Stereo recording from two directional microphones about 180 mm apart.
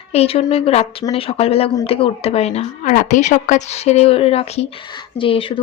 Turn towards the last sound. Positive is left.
turn(degrees=30)  # may be behind; listen again after turning